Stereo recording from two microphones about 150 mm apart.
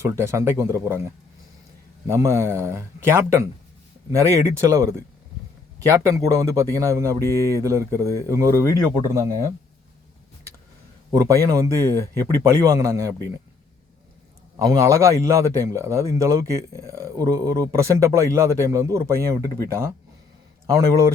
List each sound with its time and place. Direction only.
0.0 s a man's voice: 20° right (ahead or behind)
11.3 s a man's voice: 20° right (ahead or behind)
14.5 s a man's voice: 20° right (ahead or behind)